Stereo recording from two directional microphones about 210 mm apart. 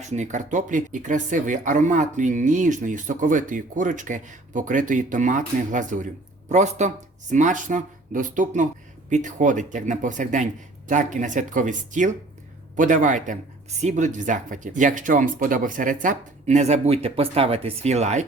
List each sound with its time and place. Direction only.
0.0 s speech: 35° right (ahead or behind)